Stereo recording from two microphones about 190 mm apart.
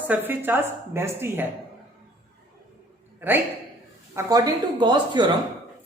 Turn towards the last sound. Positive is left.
turn(degrees=-25)  # may be behind; listen again after turning